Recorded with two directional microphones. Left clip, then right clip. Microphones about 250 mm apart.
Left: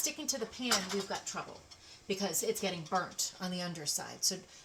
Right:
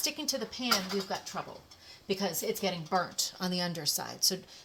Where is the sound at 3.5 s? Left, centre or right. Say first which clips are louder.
Right 5 dB; right.